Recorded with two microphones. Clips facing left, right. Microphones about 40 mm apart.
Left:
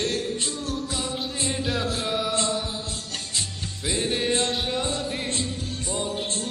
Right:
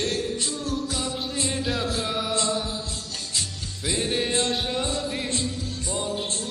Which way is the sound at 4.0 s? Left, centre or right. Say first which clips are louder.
Left 1 dB; left.